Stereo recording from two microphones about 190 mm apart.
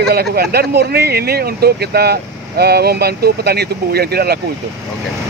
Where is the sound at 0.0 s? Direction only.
55° right (ahead or behind).